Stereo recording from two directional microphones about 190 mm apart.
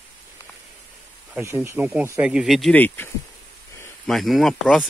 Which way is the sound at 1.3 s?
15° right (ahead or behind).